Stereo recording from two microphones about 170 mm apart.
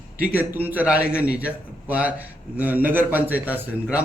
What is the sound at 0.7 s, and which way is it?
A man's voice, 10° right (ahead or behind).